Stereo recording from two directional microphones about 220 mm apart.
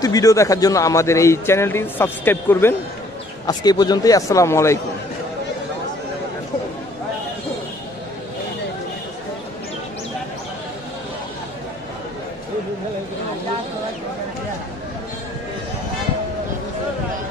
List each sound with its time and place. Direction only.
0.0 s a man's voice: 15° left (ahead or behind)